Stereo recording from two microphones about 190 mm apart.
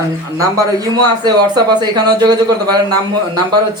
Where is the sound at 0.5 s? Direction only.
20° right (ahead or behind).